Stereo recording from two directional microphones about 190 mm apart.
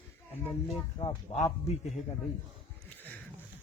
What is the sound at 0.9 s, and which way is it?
Speech, 30° left (ahead or behind).